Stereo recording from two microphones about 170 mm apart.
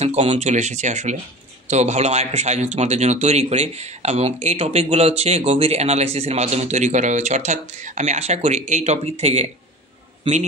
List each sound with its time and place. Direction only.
0.0 s speech: 35° right (ahead or behind)